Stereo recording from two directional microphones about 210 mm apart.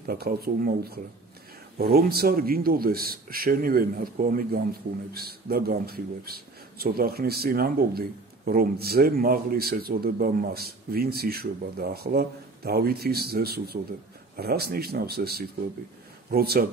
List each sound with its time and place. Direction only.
0.0 s a man's voice: 45° right (ahead or behind)